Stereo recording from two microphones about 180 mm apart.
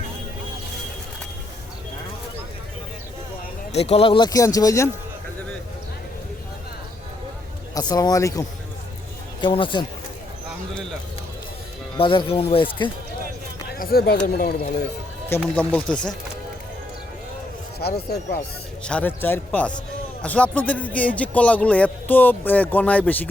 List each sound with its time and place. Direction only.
3.7 s speech: 35° left (ahead or behind); by 4.9 s 20° left (ahead or behind)
7.7 s speech: 20° left (ahead or behind)
11.9 s speech: 30° left (ahead or behind)
13.7 s speech: 55° left (ahead or behind)
15.4 s speech: 5° left (ahead or behind)
17.7 s speech: 60° left (ahead or behind)
18.9 s speech: 10° left (ahead or behind)